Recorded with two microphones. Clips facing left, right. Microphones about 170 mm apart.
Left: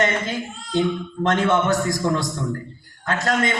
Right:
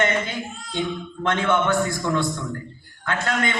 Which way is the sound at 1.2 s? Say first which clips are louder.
Left 2 dB; 40° left (ahead or behind).